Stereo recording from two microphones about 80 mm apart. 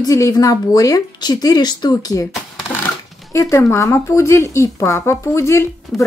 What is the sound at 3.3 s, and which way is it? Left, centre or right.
Speech, left.